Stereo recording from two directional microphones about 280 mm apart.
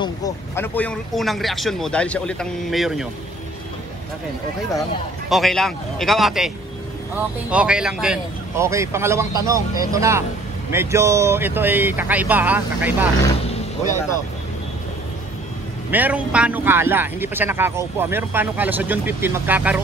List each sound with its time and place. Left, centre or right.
0.0 s speech: centre
5.3 s a man's voice: centre
15.9 s a man's voice: centre